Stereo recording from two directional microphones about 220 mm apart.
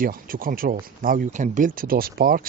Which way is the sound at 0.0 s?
40° right (ahead or behind).